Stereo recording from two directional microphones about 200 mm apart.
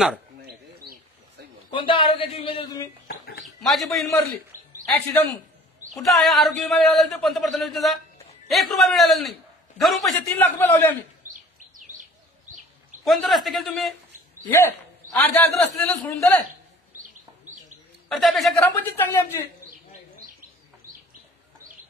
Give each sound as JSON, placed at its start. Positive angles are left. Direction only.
{"t": 0.4, "sound": "bird", "side_deg": -50}
{"t": 1.7, "sound": "a man's voice", "side_deg": 25}
{"t": 3.1, "sound": "bird", "side_deg": 50}
{"t": 3.6, "sound": "speech", "side_deg": 0}
{"t": 6.0, "sound": "a man's voice", "side_deg": 0}
{"t": 13.0, "sound": "a man's voice", "side_deg": 0}
{"t": 18.0, "sound": "a man's voice", "side_deg": 5}